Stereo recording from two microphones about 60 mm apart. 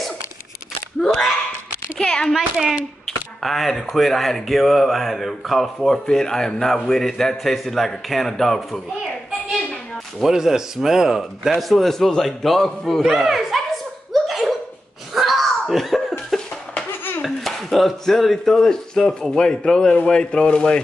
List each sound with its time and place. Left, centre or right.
1.0 s speech: centre
2.0 s a sound: centre
2.2 s speech: centre
3.4 s a man's voice: centre
10.2 s a man's voice: centre
14.1 s laughter: centre
15.1 s a sound: centre
16.7 s a sound: left
17.2 s speech: centre